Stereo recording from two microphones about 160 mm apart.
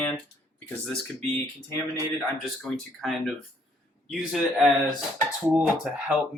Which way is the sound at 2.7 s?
5° left (ahead or behind).